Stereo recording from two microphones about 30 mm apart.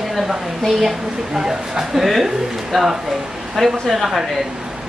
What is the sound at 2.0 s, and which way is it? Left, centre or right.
A woman's voice, centre.